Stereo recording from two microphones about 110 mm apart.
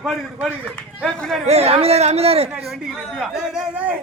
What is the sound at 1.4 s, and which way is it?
Speech, 70° right (ahead or behind).